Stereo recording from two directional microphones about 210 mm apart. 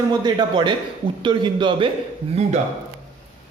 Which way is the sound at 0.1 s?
20° right (ahead or behind).